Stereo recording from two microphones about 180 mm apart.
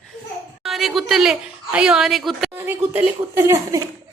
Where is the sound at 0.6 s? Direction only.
Centre (ahead or behind).